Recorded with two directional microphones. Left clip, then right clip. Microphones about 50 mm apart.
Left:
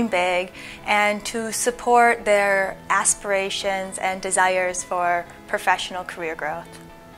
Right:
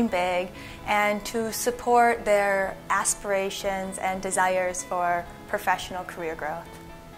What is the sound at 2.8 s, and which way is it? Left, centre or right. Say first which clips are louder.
A woman's voice: left 4 dB; left.